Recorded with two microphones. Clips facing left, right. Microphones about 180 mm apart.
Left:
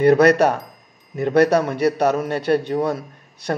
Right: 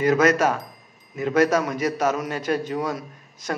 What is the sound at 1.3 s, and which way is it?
Speech, 35° left (ahead or behind).